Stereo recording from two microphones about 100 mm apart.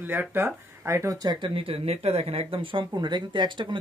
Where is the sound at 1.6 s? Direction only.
75° right (ahead or behind).